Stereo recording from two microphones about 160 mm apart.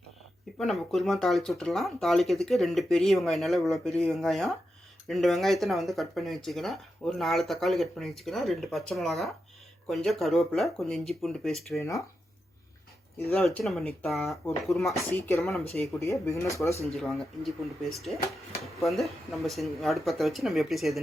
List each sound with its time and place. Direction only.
0.6 s speech: centre (ahead or behind)
11.8 s speech: 20° left (ahead or behind)
13.3 s speech: 5° left (ahead or behind)
14.9 s speech: 15° left (ahead or behind)
16.8 s speech: centre (ahead or behind)